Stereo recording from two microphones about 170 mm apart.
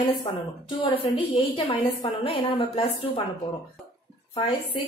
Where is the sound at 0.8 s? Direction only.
30° left (ahead or behind).